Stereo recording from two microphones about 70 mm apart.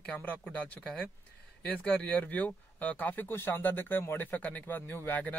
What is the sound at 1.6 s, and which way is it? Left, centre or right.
Speech, centre.